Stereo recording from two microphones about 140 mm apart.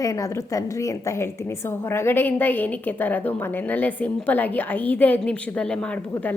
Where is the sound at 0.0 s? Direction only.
25° left (ahead or behind).